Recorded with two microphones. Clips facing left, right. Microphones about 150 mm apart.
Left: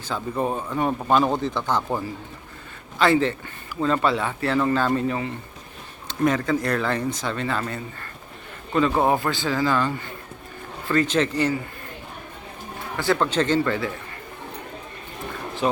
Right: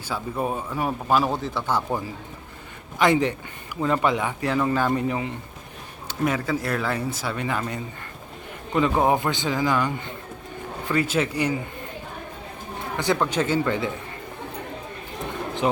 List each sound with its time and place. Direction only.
0.1 s speech: 5° right (ahead or behind)
13.0 s speech: 15° right (ahead or behind)
15.3 s a sound: 20° right (ahead or behind)